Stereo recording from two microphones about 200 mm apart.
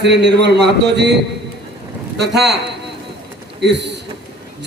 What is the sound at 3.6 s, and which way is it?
Speech, 60° right (ahead or behind).